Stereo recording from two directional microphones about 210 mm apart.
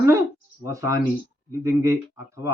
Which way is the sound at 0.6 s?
15° right (ahead or behind).